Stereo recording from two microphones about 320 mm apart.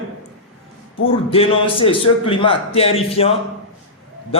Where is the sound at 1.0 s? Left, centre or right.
Centre.